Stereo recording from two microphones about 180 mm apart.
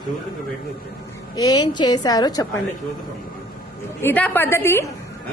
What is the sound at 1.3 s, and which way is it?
A woman's voice, 20° left (ahead or behind).